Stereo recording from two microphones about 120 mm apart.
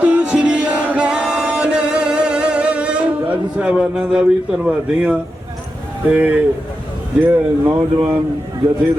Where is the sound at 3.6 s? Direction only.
10° right (ahead or behind).